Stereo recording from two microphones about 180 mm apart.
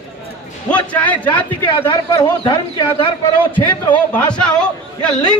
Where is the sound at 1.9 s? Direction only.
25° left (ahead or behind).